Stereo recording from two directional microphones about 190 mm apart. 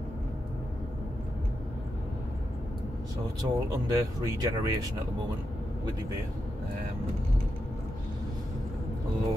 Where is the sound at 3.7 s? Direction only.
20° right (ahead or behind).